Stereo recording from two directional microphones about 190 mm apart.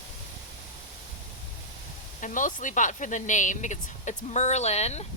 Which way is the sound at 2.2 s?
40° left (ahead or behind).